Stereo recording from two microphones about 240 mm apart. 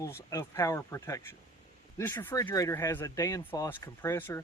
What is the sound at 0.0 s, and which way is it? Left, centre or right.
Speech, centre.